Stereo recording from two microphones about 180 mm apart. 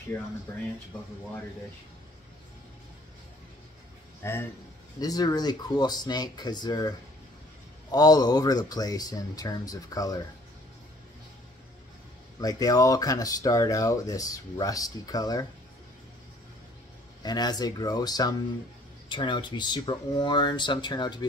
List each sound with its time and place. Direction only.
0.1 s speech: 10° left (ahead or behind)
4.2 s a man's voice: 15° left (ahead or behind)
7.9 s speech: 20° left (ahead or behind)
12.4 s speech: 20° left (ahead or behind)
17.2 s speech: 20° left (ahead or behind)